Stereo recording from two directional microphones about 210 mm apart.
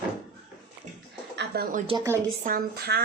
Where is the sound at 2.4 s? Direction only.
45° right (ahead or behind).